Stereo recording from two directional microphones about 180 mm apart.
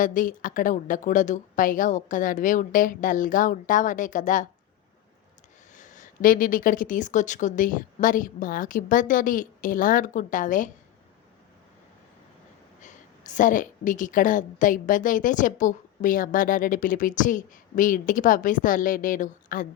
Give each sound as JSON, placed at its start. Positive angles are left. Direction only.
{"t": 0.0, "sound": "a woman's voice", "side_deg": 45}
{"t": 5.7, "sound": "a woman's voice", "side_deg": 45}
{"t": 12.8, "sound": "a woman's voice", "side_deg": 45}